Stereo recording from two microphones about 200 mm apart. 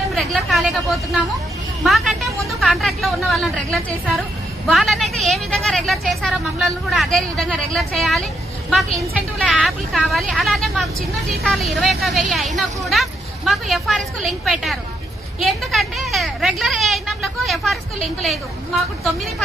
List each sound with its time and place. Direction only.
0.1 s speech: centre (ahead or behind)